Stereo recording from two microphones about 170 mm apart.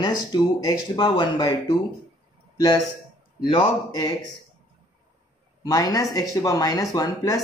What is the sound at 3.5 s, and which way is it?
Speech, 25° left (ahead or behind).